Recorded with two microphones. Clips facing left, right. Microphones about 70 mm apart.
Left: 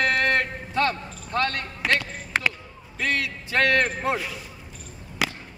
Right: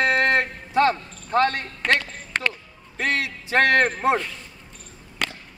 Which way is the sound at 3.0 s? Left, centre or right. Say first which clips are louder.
Right 2 dB; right.